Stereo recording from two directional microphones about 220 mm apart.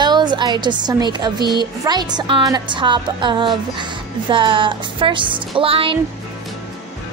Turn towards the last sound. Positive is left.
turn(degrees=-25)  # may be behind; listen again after turning